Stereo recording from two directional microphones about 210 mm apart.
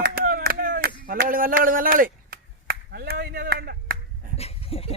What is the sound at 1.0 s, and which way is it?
Finger snapping, 40° right (ahead or behind).